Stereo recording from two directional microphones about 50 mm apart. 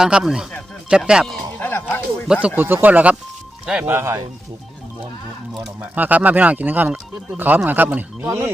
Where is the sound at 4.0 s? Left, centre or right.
Right.